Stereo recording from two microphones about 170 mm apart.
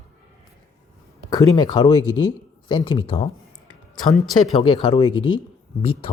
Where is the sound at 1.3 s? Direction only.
25° left (ahead or behind).